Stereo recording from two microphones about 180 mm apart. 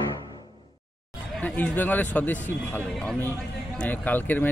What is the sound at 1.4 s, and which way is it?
Speech, 10° left (ahead or behind).